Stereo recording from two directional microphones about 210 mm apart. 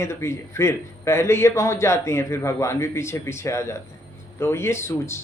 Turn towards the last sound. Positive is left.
turn(degrees=10)  # may be behind; listen again after turning